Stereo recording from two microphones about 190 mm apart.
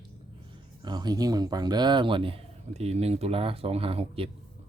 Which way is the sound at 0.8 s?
20° right (ahead or behind).